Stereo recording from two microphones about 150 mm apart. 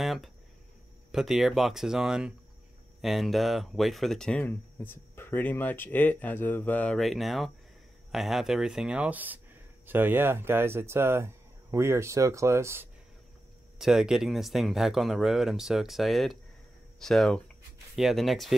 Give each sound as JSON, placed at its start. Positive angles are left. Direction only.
{"t": 0.0, "sound": "a sound", "side_deg": 0}
{"t": 1.1, "sound": "speech", "side_deg": 0}
{"t": 13.7, "sound": "speech", "side_deg": -5}